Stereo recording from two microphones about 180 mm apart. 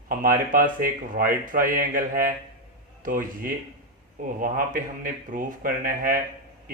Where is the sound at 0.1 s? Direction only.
50° right (ahead or behind).